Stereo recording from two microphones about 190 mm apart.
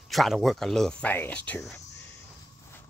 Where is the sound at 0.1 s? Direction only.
Centre (ahead or behind).